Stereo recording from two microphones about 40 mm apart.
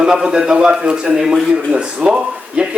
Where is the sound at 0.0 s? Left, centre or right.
Centre.